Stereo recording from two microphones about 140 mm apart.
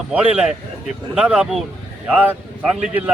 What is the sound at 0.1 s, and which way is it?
A man's voice, 10° right (ahead or behind).